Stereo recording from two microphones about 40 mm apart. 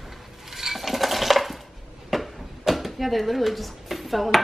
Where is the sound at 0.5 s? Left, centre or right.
Centre.